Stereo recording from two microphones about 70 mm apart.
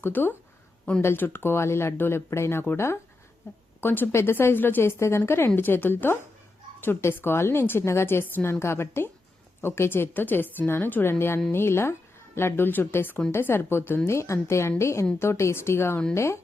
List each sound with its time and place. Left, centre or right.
0.0 s a woman's voice: left